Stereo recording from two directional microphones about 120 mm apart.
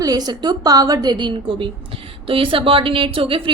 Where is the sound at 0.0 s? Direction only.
30° right (ahead or behind).